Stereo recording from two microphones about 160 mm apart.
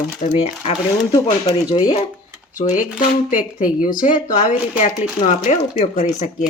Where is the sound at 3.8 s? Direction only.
55° left (ahead or behind).